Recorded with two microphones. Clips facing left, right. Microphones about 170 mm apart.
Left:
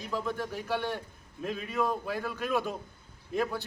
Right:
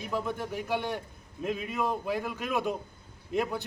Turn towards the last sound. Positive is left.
turn(degrees=-15)  # may be behind; listen again after turning